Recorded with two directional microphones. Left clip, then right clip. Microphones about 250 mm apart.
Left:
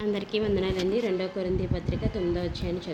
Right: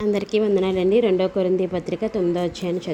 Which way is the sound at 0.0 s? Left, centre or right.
Right.